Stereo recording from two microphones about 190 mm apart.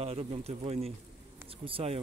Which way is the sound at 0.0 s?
30° right (ahead or behind).